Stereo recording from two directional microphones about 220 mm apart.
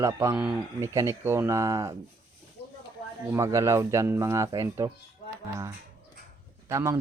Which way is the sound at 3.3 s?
15° right (ahead or behind).